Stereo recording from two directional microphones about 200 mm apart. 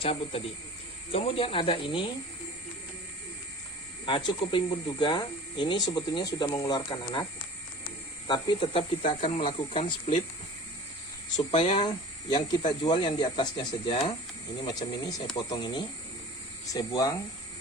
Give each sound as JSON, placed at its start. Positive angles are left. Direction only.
{"t": 0.0, "sound": "speech", "side_deg": 30}
{"t": 4.0, "sound": "speech", "side_deg": 25}
{"t": 8.3, "sound": "speech", "side_deg": 25}
{"t": 11.5, "sound": "speech", "side_deg": 30}